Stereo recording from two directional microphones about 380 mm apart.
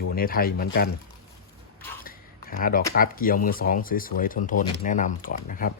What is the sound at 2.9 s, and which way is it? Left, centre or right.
Speech, left.